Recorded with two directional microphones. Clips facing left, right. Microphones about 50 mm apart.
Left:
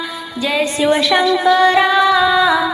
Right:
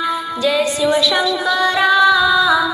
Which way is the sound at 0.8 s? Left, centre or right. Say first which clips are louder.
Left 2 dB; left.